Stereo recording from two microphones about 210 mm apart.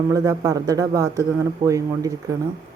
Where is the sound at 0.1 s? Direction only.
15° right (ahead or behind).